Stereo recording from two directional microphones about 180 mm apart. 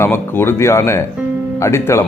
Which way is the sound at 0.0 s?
15° left (ahead or behind).